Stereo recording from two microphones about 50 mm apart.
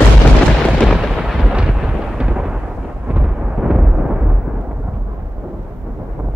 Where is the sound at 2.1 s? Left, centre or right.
Centre.